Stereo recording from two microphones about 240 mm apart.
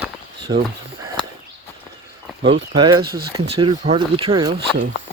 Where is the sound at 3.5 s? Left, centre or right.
Right.